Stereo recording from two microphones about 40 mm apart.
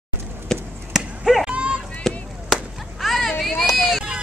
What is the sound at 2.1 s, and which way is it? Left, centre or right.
Chop, centre.